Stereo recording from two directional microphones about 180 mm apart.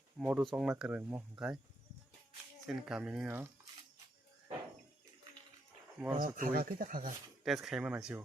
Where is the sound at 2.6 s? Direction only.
5° right (ahead or behind).